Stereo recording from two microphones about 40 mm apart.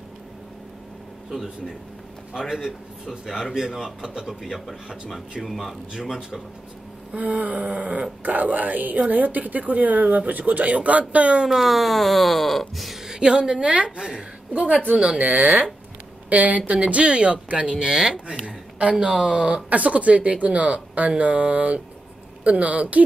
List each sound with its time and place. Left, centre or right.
2.3 s a man's voice: centre
4.3 s speech: centre
5.9 s a man's voice: centre
7.2 s speech: right
11.4 s speech: centre
13.0 s a woman's voice: centre
14.5 s a woman's voice: right
16.3 s a woman's voice: right
18.9 s a man's voice: centre
19.3 s a woman's voice: right